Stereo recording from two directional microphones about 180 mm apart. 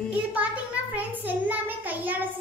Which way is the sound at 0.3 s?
10° right (ahead or behind).